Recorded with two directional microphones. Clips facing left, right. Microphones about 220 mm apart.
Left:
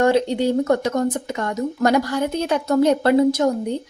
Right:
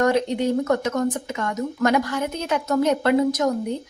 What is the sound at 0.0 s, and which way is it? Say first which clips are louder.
A woman's voice: left 3 dB; 30° left (ahead or behind).